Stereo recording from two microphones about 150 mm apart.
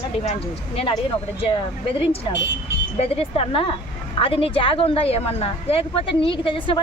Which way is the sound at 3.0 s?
40° left (ahead or behind).